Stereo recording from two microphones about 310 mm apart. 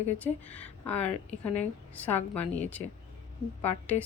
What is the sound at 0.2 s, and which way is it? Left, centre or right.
A woman's voice, centre.